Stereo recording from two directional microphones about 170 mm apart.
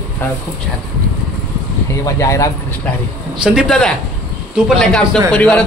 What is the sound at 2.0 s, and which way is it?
Speech, 20° left (ahead or behind).